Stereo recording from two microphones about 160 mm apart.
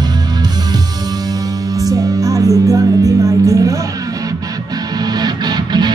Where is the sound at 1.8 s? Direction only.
20° right (ahead or behind).